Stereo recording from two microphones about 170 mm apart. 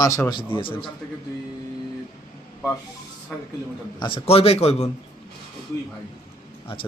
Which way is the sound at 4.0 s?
30° left (ahead or behind).